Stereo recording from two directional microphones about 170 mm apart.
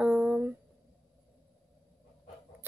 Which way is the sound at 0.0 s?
10° right (ahead or behind).